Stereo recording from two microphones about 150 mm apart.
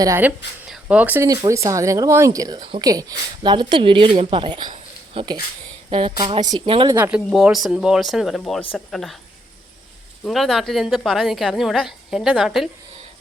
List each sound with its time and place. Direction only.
0.0 s speech: 15° right (ahead or behind); by 6.9 s 30° right (ahead or behind)
6.9 s speech: 15° right (ahead or behind)
7.3 s a woman's voice: centre (ahead or behind)
10.2 s a woman's voice: centre (ahead or behind)